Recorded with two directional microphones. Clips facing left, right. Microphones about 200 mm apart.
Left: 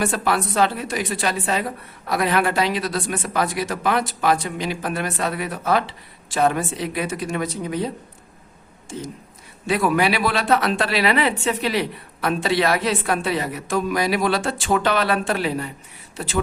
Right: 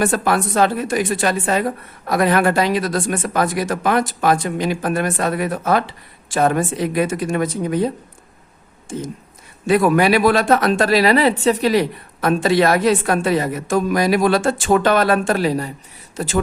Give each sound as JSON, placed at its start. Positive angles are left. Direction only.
{"t": 0.0, "sound": "speech", "side_deg": -45}
{"t": 9.6, "sound": "speech", "side_deg": -50}